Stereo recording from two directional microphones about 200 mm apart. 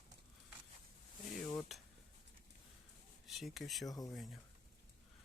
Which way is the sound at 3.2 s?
Centre (ahead or behind).